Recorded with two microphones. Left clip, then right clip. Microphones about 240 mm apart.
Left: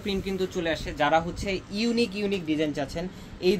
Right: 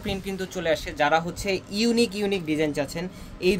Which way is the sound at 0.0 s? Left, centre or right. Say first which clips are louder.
Left 2 dB; right.